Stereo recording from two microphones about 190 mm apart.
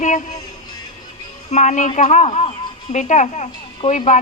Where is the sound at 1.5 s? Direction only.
40° left (ahead or behind).